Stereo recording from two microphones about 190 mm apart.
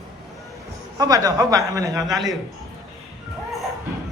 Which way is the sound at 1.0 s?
20° right (ahead or behind).